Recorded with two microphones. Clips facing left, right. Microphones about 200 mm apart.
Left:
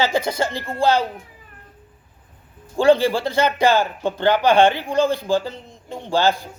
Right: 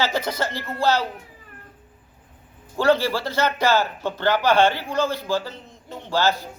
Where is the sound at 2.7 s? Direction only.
15° left (ahead or behind).